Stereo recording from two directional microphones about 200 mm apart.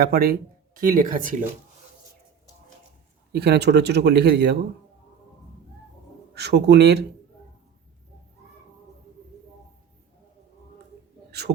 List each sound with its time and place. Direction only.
0.0 s speech: 50° right (ahead or behind)
3.3 s speech: 55° right (ahead or behind)
6.3 s speech: 55° right (ahead or behind)
11.3 s a sound: 55° right (ahead or behind)